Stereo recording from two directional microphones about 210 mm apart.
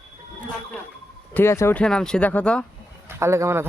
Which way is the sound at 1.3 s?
10° left (ahead or behind).